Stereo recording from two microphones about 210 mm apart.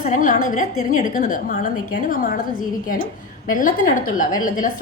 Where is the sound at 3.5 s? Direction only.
40° left (ahead or behind).